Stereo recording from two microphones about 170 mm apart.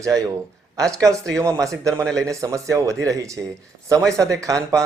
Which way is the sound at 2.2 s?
20° right (ahead or behind).